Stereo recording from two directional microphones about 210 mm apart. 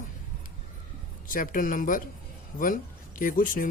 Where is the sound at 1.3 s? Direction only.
40° left (ahead or behind).